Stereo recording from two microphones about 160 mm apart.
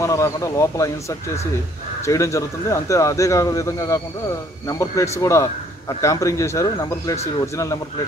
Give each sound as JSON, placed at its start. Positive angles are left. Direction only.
{"t": 0.0, "sound": "a man's voice", "side_deg": 20}